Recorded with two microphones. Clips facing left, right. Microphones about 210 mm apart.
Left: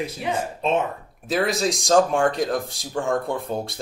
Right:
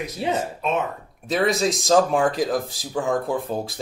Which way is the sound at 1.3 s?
Centre (ahead or behind).